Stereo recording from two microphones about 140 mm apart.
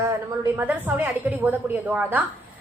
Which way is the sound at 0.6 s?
10° right (ahead or behind).